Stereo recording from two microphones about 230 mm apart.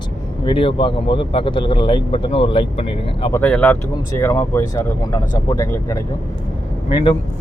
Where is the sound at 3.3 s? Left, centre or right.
Centre.